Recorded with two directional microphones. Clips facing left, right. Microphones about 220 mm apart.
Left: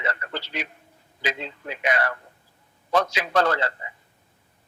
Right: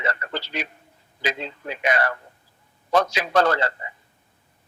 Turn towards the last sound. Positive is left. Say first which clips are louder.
# right 2 dB
turn(degrees=-40)  # may be behind; listen again after turning